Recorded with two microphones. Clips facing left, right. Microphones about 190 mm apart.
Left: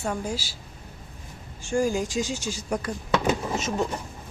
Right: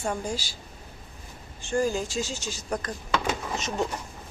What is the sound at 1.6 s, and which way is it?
Speech, 10° left (ahead or behind).